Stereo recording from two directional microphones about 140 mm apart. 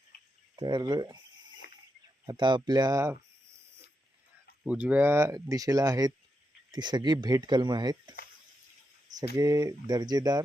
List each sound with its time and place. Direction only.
0.1 s cricket: 90° left
0.5 s speech: 30° right (ahead or behind)
2.2 s speech: 30° right (ahead or behind)
4.6 s speech: 10° right (ahead or behind); by 10.4 s 25° right (ahead or behind)